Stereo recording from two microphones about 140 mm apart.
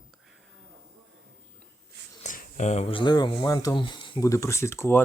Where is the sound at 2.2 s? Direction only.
65° left (ahead or behind).